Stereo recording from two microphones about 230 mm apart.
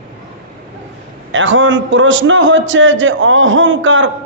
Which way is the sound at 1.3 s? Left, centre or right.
Right.